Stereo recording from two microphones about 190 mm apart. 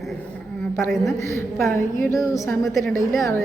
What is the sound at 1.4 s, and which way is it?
Speech, 15° left (ahead or behind).